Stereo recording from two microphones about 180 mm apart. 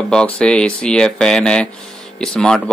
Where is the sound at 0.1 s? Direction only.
5° left (ahead or behind).